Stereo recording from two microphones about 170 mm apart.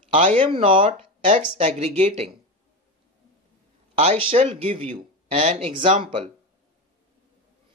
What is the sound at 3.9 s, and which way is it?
Speech, 35° right (ahead or behind).